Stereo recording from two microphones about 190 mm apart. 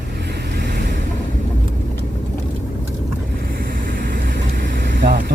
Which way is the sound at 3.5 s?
50° right (ahead or behind).